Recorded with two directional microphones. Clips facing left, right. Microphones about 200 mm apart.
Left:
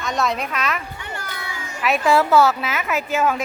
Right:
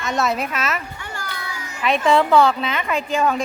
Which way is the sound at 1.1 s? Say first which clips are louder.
Even; 20° left (ahead or behind).